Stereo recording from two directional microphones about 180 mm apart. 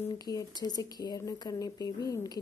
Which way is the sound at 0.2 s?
20° left (ahead or behind).